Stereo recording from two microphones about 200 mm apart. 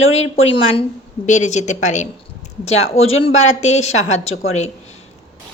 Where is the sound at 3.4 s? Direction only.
35° left (ahead or behind).